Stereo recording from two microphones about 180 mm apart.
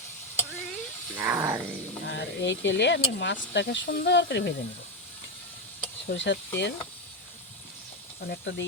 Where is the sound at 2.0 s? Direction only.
80° left.